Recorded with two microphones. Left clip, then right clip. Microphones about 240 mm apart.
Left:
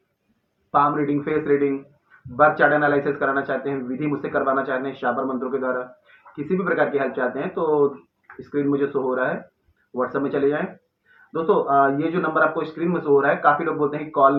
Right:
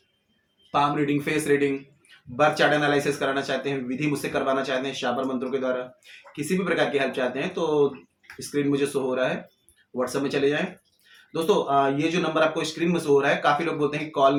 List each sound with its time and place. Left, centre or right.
1.1 s speech: right